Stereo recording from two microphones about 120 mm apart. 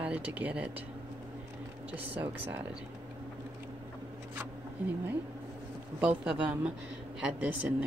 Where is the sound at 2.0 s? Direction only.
15° right (ahead or behind).